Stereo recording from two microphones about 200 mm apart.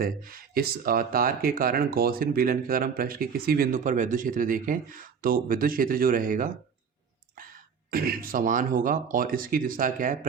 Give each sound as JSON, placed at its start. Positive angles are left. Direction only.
{"t": 0.0, "sound": "speech", "side_deg": -45}
{"t": 7.9, "sound": "speech", "side_deg": -45}